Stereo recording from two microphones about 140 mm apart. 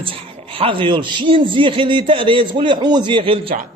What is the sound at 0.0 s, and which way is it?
A man's voice, 40° right (ahead or behind).